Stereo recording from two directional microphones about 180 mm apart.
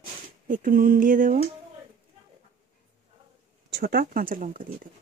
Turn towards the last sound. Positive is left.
turn(degrees=-50)  # may be behind; listen again after turning